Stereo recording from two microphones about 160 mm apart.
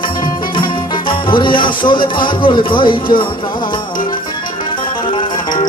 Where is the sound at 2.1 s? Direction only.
30° left (ahead or behind).